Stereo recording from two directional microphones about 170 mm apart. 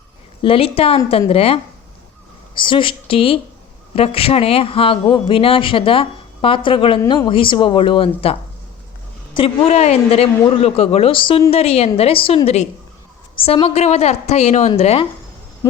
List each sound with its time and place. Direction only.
0.4 s speech: 35° left (ahead or behind)
2.6 s speech: 30° left (ahead or behind)
7.0 s speech: 15° left (ahead or behind)
7.3 s speech: 30° left (ahead or behind)